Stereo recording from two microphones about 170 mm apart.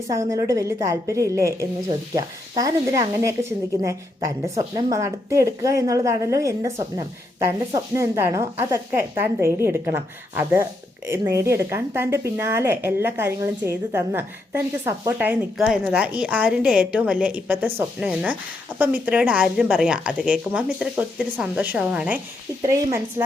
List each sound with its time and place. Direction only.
0.1 s a woman's voice: 20° right (ahead or behind)
22.6 s a woman's voice: 20° right (ahead or behind)